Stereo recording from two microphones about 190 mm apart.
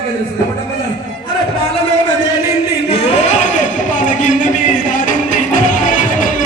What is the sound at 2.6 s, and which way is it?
Singing, 60° left (ahead or behind).